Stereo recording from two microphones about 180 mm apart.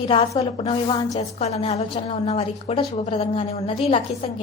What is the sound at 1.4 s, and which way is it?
A woman's voice, 35° left (ahead or behind).